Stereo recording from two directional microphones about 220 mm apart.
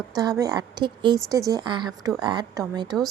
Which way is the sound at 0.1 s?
15° right (ahead or behind).